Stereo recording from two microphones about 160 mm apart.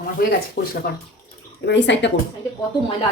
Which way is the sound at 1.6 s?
90° left.